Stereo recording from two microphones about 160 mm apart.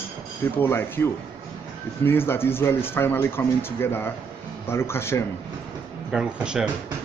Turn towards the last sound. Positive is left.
turn(degrees=-5)  # may be behind; listen again after turning